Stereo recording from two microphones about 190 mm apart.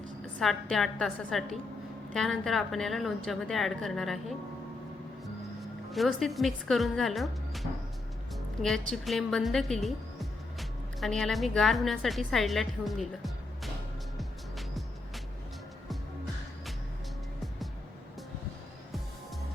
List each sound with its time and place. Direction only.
0.3 s a woman's voice: centre (ahead or behind)
5.9 s a woman's voice: centre (ahead or behind)